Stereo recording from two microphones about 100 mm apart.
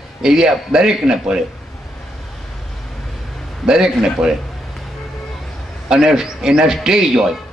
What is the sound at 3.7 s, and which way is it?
Speech, 5° right (ahead or behind).